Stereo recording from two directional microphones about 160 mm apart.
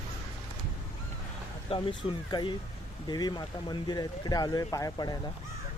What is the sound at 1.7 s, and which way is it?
Speech, 30° left (ahead or behind).